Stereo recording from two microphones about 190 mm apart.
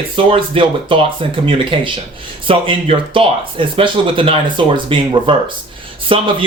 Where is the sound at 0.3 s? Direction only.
25° right (ahead or behind).